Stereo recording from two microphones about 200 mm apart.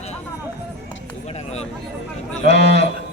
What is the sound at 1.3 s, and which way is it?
Speech, 35° left (ahead or behind).